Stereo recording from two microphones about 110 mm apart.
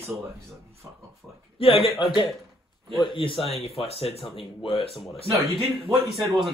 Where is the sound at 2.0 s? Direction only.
45° left (ahead or behind).